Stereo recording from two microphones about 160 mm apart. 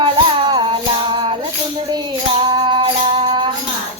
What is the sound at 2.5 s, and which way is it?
Music, 30° right (ahead or behind).